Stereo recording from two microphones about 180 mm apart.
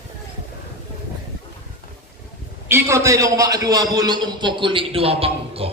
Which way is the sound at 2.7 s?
15° right (ahead or behind).